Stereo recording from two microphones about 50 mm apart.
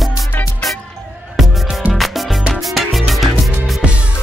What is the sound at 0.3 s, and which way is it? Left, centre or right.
Music, left.